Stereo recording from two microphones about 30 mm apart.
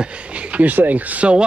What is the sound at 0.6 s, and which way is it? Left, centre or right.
Speech, right.